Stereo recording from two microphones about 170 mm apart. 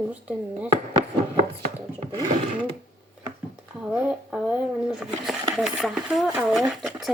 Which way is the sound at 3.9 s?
5° right (ahead or behind).